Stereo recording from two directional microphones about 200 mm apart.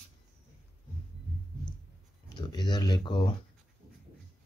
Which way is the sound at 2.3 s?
20° left (ahead or behind).